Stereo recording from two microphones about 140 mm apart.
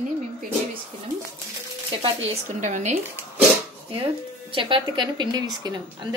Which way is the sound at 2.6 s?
60° right (ahead or behind).